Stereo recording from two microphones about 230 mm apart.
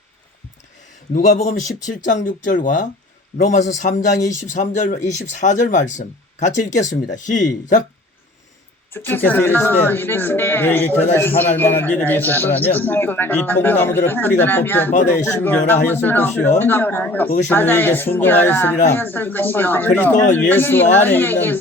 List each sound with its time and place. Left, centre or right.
1.1 s speech: left
8.9 s speech: centre